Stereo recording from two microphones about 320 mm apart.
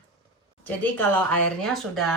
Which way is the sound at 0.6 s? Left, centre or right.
Centre.